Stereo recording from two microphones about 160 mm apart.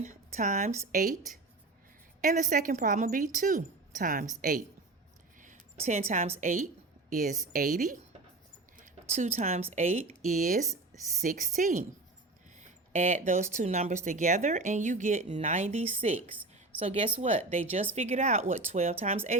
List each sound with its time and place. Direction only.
0.0 s a woman's voice: 50° right (ahead or behind)
2.2 s a woman's voice: 50° right (ahead or behind)
5.4 s a sound: 50° right (ahead or behind)
6.4 s a woman's voice: 55° right (ahead or behind)
9.7 s speech: 50° right (ahead or behind)
16.7 s a sound: 10° right (ahead or behind)
17.2 s speech: 40° right (ahead or behind)